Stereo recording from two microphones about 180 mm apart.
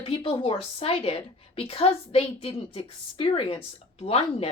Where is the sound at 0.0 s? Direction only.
30° left (ahead or behind).